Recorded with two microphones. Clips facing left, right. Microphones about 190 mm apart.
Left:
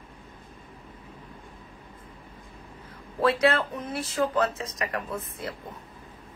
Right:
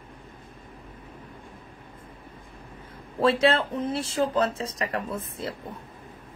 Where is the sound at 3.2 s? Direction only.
25° right (ahead or behind).